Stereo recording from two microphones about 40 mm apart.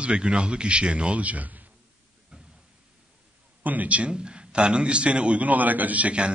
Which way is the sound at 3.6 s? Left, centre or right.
Right.